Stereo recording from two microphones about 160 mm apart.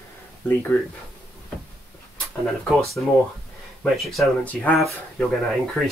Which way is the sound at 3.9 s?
Centre (ahead or behind).